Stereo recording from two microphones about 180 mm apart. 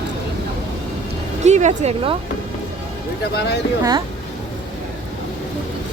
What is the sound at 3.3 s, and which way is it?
Speech, 70° left (ahead or behind).